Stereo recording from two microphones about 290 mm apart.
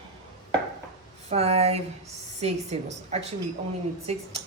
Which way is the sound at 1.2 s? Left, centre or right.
Right.